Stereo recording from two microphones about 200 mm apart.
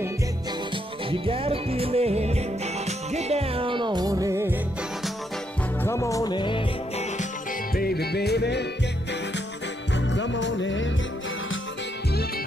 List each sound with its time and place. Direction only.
1.1 s music: 30° right (ahead or behind)
5.9 s music: 15° left (ahead or behind)
7.7 s music: 50° left (ahead or behind)
9.9 s music: 65° left (ahead or behind)